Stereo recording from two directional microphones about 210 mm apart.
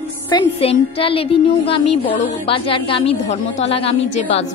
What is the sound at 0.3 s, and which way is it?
A woman's voice, 25° left (ahead or behind).